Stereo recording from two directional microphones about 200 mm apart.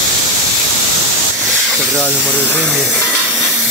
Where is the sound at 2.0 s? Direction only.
5° left (ahead or behind).